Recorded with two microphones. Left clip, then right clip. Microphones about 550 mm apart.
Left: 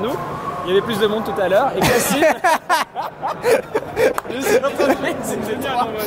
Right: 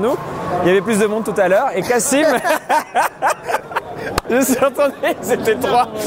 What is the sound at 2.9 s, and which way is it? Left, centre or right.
Snicker, right.